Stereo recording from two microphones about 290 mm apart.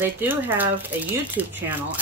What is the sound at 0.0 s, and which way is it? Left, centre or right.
Speech, centre.